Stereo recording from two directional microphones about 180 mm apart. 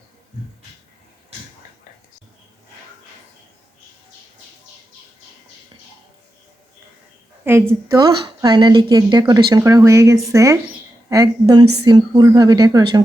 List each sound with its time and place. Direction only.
7.4 s a woman's voice: 10° right (ahead or behind)
7.9 s a woman's voice: 25° right (ahead or behind)